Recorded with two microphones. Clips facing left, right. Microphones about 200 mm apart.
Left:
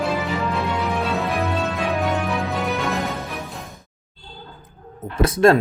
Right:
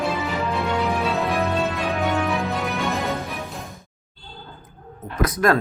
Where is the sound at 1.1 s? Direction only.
Centre (ahead or behind).